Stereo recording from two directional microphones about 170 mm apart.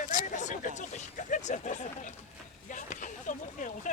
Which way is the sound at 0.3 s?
45° left (ahead or behind).